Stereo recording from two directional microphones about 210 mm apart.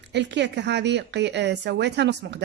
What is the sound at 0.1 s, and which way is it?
A woman's voice, 55° right (ahead or behind).